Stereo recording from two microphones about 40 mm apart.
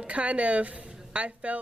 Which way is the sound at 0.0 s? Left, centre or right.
Right.